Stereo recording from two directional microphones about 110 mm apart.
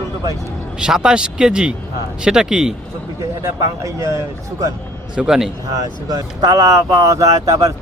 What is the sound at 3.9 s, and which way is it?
Speech, 30° right (ahead or behind).